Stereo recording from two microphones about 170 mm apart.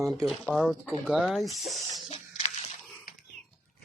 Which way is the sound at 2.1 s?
40° left (ahead or behind).